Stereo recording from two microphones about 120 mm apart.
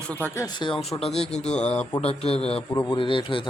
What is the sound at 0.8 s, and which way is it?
Speech, 60° left (ahead or behind).